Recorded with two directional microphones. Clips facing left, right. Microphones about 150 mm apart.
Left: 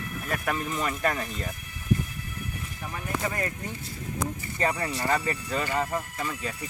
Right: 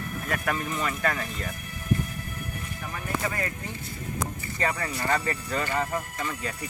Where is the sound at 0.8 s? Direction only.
20° left (ahead or behind).